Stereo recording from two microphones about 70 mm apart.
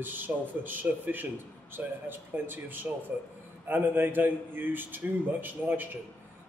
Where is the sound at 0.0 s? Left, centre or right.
Right.